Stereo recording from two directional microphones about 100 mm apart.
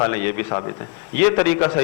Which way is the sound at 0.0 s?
30° left (ahead or behind).